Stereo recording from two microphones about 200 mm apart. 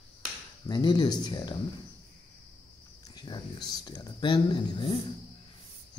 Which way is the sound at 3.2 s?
20° left (ahead or behind).